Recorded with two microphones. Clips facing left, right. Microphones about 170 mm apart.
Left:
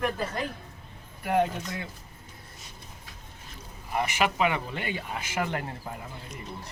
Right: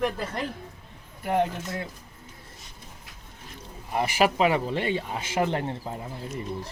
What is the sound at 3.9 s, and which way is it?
Speech, 35° right (ahead or behind).